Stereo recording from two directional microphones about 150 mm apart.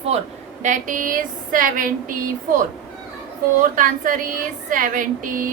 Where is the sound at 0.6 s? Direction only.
60° right (ahead or behind).